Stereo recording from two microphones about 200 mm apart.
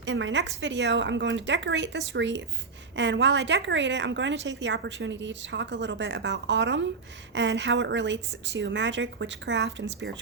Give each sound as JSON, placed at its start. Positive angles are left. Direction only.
{"t": 0.0, "sound": "a woman's voice", "side_deg": -65}